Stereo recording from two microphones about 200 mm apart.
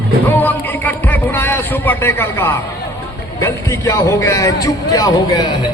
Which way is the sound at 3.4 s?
15° left (ahead or behind).